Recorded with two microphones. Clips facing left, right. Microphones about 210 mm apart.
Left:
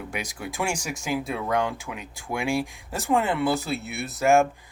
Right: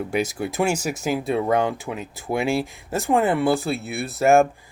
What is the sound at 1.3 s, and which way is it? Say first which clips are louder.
Speech: right 7 dB; 35° right (ahead or behind).